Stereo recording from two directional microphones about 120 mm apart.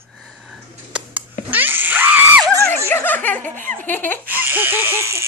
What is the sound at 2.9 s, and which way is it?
Snicker, 15° left (ahead or behind).